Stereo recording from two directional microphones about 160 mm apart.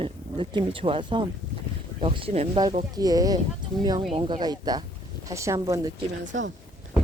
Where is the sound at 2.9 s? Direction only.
25° right (ahead or behind).